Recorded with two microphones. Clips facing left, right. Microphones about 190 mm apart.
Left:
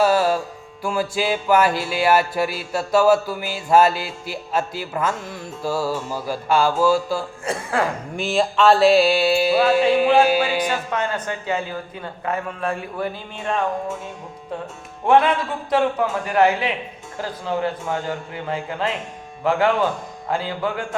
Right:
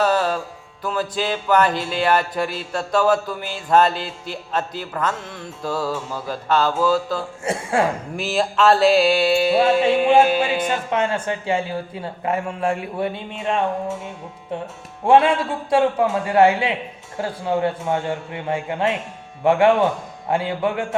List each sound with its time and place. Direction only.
0.0 s music: 10° left (ahead or behind)
7.4 s speech: 25° right (ahead or behind)
8.1 s mantra: centre (ahead or behind)
10.7 s speech: 25° right (ahead or behind)
15.0 s speech: 25° right (ahead or behind)